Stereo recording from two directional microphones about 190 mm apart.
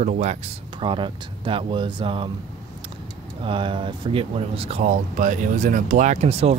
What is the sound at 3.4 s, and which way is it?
Speech, 25° right (ahead or behind).